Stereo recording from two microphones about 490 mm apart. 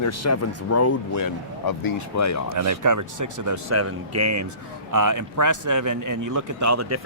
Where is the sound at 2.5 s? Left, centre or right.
Right.